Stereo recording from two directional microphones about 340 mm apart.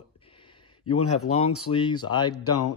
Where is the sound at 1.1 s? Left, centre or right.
Centre.